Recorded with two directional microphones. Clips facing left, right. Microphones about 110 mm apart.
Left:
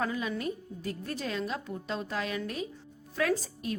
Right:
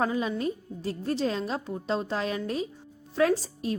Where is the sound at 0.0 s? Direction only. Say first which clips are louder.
Right 5 dB; 30° right (ahead or behind).